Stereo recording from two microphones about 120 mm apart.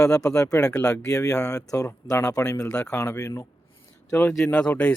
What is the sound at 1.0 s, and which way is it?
Speech, 30° left (ahead or behind).